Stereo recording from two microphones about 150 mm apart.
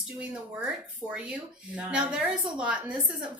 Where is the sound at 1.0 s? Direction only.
5° right (ahead or behind).